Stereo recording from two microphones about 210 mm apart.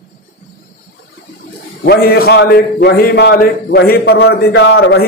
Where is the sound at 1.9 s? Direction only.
45° left (ahead or behind).